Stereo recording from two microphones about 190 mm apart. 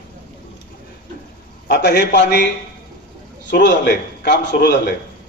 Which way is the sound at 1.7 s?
60° left (ahead or behind).